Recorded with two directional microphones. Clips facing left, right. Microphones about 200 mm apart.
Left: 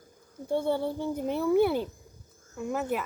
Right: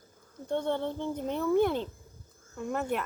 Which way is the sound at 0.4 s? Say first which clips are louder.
Left 3 dB; 10° left (ahead or behind).